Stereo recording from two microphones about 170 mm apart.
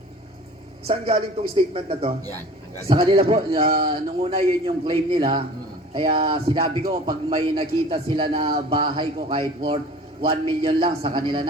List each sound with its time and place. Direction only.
0.9 s speech: 35° right (ahead or behind)